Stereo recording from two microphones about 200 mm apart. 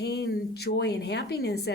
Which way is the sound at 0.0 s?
55° left (ahead or behind).